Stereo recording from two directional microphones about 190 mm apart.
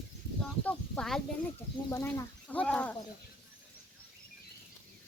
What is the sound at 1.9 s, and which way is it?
Speech, 15° left (ahead or behind).